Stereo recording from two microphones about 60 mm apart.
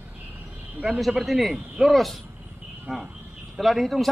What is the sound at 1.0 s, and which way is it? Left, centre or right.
Speech, centre.